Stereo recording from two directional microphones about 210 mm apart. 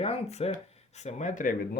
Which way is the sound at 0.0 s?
30° left (ahead or behind).